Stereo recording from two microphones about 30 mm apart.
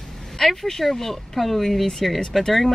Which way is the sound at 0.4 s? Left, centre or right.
Centre.